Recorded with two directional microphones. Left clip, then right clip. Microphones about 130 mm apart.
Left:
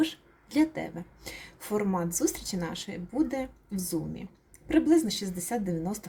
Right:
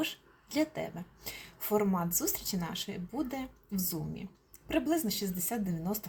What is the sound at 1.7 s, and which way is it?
Speech, 25° left (ahead or behind).